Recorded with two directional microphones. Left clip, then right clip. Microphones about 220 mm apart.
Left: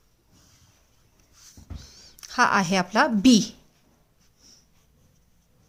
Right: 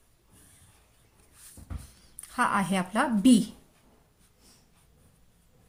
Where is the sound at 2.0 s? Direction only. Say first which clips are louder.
Left 6 dB; 40° left (ahead or behind).